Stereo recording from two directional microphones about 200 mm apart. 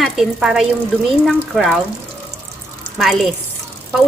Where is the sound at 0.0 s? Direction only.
Centre (ahead or behind).